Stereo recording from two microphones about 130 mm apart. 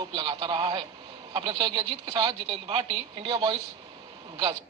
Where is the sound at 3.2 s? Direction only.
45° right (ahead or behind).